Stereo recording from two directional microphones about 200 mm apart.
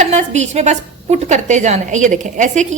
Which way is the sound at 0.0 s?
35° right (ahead or behind).